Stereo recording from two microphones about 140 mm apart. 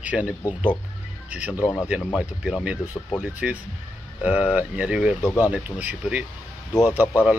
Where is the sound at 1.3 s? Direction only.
10° right (ahead or behind).